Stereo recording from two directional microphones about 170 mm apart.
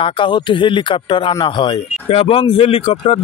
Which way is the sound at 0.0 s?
30° left (ahead or behind).